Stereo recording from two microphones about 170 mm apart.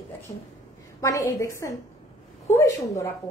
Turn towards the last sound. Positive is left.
turn(degrees=20)  # may be behind; listen again after turning